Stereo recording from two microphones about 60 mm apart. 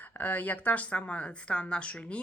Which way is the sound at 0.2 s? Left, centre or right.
Left.